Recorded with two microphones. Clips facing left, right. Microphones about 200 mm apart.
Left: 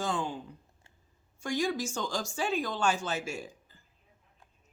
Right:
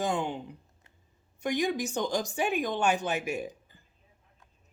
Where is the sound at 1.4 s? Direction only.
20° right (ahead or behind).